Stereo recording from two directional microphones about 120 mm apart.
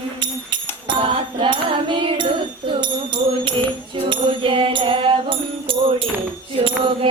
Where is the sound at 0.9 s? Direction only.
45° right (ahead or behind).